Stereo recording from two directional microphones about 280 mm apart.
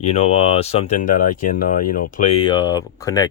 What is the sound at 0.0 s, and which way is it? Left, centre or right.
Speech, left.